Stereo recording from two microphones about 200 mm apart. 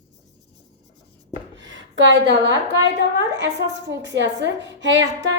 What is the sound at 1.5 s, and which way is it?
A woman's voice, 65° right (ahead or behind).